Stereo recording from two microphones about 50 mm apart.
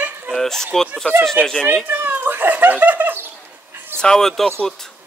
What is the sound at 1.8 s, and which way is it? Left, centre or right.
Speech, right.